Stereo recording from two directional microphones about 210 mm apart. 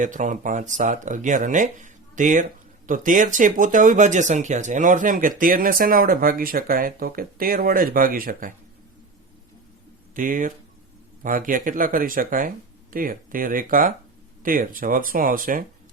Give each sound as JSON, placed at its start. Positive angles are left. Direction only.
{"t": 0.0, "sound": "speech", "side_deg": -35}
{"t": 10.2, "sound": "speech", "side_deg": -40}